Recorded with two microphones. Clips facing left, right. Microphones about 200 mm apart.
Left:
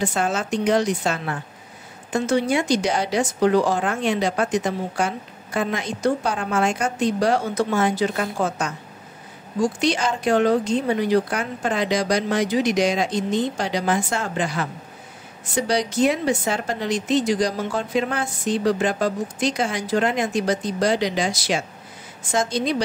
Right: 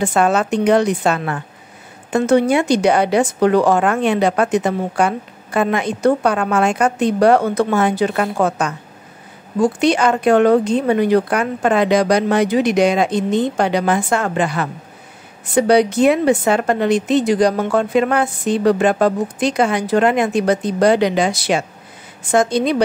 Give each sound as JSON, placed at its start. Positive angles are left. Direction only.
{"t": 0.0, "sound": "a woman's voice", "side_deg": -60}